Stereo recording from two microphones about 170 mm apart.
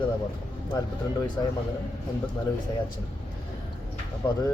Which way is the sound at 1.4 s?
15° left (ahead or behind).